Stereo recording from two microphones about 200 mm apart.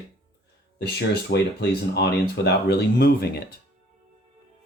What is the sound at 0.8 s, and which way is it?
Speech, 55° left (ahead or behind).